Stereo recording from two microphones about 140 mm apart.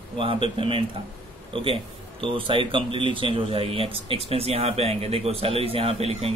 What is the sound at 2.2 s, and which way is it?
Speech, 40° right (ahead or behind).